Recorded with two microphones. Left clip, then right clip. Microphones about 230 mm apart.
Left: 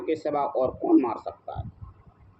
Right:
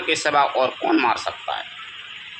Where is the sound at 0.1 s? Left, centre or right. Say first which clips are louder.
Right 8 dB; right.